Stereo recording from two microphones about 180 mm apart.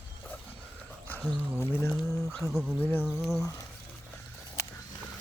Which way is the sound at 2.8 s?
10° left (ahead or behind).